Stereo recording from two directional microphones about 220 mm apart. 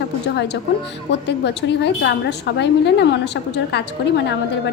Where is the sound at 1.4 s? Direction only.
50° left (ahead or behind).